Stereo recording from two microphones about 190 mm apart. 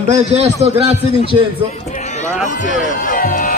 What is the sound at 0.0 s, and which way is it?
A man's voice, 35° right (ahead or behind).